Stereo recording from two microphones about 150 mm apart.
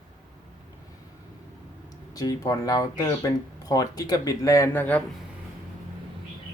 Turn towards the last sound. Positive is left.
turn(degrees=10)  # may be behind; listen again after turning